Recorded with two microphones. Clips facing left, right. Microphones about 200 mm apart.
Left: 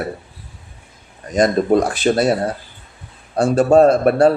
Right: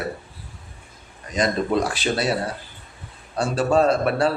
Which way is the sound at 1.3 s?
45° left (ahead or behind).